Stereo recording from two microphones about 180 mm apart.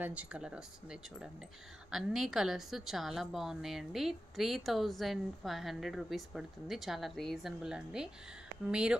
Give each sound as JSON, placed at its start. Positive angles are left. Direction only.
{"t": 0.0, "sound": "a woman's voice", "side_deg": -5}